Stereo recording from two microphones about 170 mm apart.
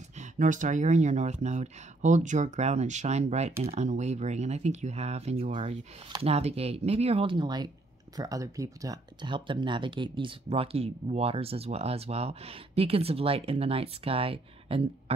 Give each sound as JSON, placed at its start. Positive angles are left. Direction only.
{"t": 0.2, "sound": "speech", "side_deg": -50}